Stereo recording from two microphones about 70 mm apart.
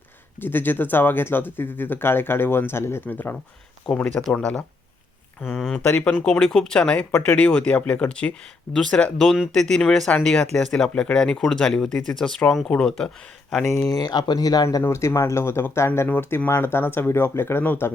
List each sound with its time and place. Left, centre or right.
0.3 s speech: left
3.8 s speech: centre
5.8 s speech: centre
13.9 s speech: left
14.8 s speech: left
16.0 s speech: left